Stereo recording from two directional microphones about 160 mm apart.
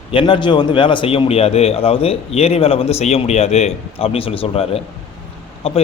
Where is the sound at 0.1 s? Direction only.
35° left (ahead or behind).